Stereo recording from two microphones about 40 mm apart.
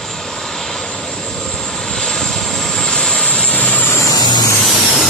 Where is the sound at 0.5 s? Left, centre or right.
Centre.